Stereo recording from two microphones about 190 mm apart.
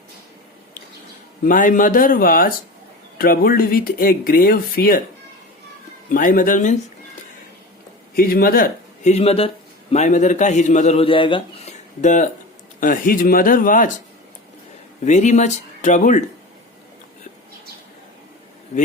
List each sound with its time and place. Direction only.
1.5 s speech: 45° left (ahead or behind)
6.1 s speech: 45° left (ahead or behind)
8.1 s a man's voice: 50° left (ahead or behind); by 11.7 s 25° left (ahead or behind)
12.0 s a man's voice: 40° left (ahead or behind)
15.0 s a man's voice: 40° left (ahead or behind)